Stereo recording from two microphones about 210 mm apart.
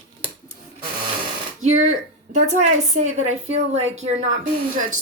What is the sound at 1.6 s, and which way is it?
A woman's voice, 35° right (ahead or behind).